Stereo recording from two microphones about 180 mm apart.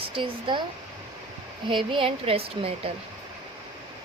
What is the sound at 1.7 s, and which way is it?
A woman's voice, 30° right (ahead or behind).